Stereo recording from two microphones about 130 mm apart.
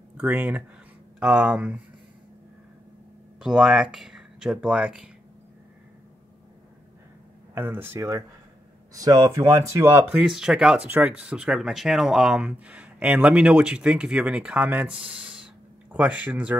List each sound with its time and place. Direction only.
0.2 s speech: 10° right (ahead or behind)
3.3 s speech: 5° right (ahead or behind)
7.5 s speech: 15° right (ahead or behind)
10.1 s speech: 5° right (ahead or behind)